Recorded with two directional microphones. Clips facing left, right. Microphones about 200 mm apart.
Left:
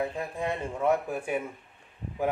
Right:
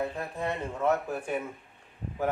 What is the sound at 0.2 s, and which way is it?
A man's voice, 10° left (ahead or behind).